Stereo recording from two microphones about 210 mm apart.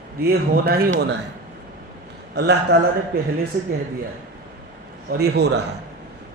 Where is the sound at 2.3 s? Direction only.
50° right (ahead or behind).